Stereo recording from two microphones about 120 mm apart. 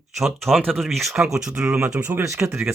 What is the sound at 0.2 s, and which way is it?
Speech, centre (ahead or behind).